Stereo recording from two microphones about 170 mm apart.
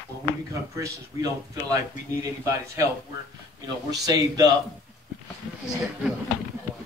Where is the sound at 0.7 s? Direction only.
20° right (ahead or behind).